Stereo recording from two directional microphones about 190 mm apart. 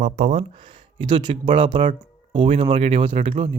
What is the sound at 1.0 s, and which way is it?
Speech, 25° right (ahead or behind).